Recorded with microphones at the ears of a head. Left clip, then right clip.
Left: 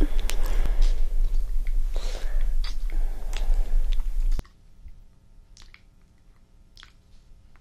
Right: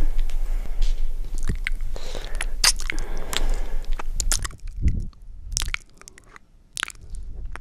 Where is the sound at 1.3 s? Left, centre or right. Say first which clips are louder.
Right 19 dB; right.